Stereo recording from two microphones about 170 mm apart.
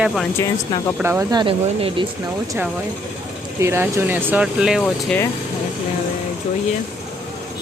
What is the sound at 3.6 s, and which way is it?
Speech, 15° right (ahead or behind).